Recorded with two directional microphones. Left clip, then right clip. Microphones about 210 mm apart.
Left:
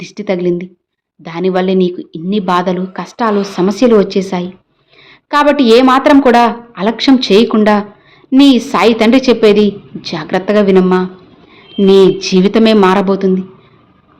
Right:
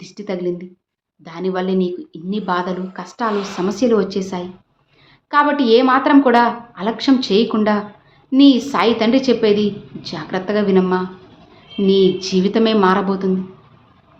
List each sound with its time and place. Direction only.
0.0 s a woman's voice: 40° left (ahead or behind)